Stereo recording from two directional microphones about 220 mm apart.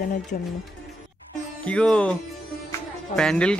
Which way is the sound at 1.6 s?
5° left (ahead or behind).